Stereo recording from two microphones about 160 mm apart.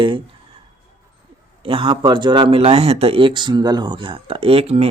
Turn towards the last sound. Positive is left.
turn(degrees=-40)  # may be behind; listen again after turning